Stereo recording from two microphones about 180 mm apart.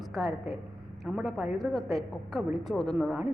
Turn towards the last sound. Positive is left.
turn(degrees=0)  # may be behind; listen again after turning